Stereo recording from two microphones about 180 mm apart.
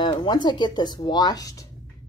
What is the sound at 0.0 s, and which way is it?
Speech, 25° left (ahead or behind).